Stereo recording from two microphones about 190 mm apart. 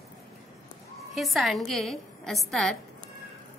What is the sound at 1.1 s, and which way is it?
A woman's voice, centre (ahead or behind).